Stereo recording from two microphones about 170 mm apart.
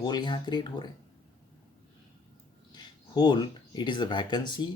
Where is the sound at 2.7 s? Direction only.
25° left (ahead or behind).